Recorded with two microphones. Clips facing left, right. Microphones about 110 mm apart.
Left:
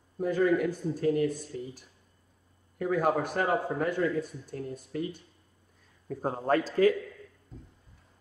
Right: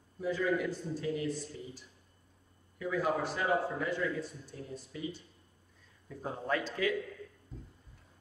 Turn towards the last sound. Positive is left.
turn(degrees=40)  # may be behind; listen again after turning